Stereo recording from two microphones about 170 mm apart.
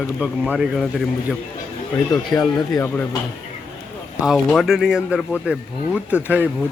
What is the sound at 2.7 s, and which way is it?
Speech, 5° left (ahead or behind).